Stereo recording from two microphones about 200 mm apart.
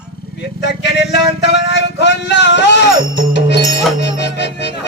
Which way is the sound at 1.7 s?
60° left (ahead or behind).